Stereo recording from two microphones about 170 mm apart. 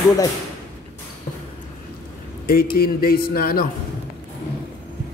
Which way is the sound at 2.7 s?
65° left (ahead or behind).